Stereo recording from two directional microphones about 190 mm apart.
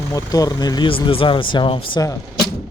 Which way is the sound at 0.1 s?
15° left (ahead or behind).